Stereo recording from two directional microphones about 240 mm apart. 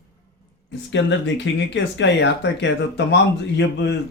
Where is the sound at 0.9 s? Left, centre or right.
Left.